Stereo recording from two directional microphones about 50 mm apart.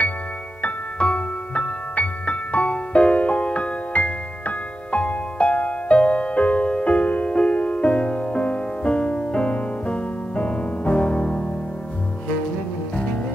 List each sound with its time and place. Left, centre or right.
0.6 s music: left